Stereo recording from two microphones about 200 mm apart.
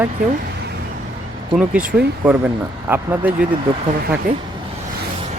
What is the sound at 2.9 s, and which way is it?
Speech, 10° right (ahead or behind).